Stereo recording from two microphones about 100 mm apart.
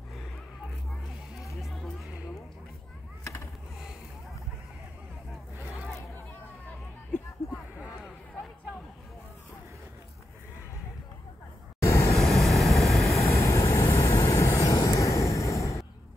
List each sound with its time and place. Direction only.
1.6 s music: centre (ahead or behind)
8.0 s a sound: 5° left (ahead or behind)
11.8 s vehicle: 30° left (ahead or behind)
12.2 s vehicle: centre (ahead or behind)
13.2 s vehicle: 30° left (ahead or behind)